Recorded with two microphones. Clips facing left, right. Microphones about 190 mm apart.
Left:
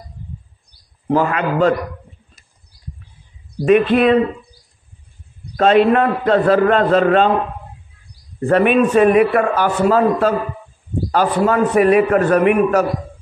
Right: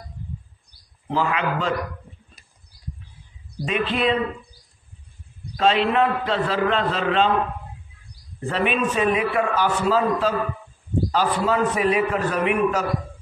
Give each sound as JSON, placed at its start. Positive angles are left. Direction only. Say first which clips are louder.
{"t": 1.0, "sound": "a man's voice", "louder": "left 6 dB", "side_deg": 55}
{"t": 3.6, "sound": "a man's voice", "louder": "left 10 dB", "side_deg": 55}
{"t": 5.6, "sound": "a man's voice", "louder": "left 7 dB", "side_deg": 50}
{"t": 8.4, "sound": "a man's voice", "louder": "left 10 dB", "side_deg": 55}